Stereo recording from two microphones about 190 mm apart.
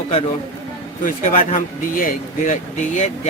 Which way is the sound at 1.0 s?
45° left (ahead or behind).